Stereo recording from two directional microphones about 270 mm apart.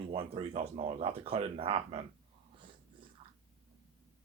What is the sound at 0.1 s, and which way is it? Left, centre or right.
Speech, centre.